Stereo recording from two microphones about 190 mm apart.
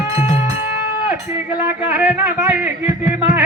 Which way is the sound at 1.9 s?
10° right (ahead or behind).